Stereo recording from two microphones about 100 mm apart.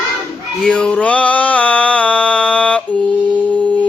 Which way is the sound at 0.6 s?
10° left (ahead or behind).